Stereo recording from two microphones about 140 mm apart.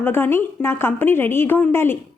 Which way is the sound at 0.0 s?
15° left (ahead or behind).